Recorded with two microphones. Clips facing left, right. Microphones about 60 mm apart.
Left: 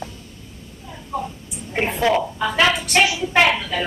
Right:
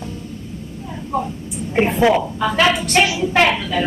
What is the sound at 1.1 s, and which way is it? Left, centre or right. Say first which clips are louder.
Speech: right 4 dB; right.